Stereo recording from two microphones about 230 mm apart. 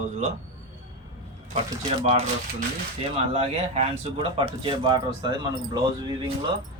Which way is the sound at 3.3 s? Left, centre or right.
Right.